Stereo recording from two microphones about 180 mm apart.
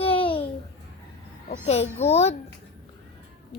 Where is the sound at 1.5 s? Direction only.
35° left (ahead or behind).